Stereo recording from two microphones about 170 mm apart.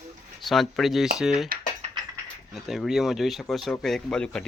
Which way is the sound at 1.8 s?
40° right (ahead or behind).